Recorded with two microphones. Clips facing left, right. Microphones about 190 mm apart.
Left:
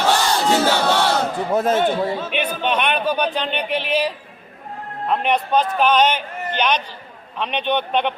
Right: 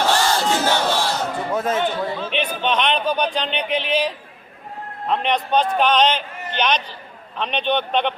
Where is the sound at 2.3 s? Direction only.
10° left (ahead or behind).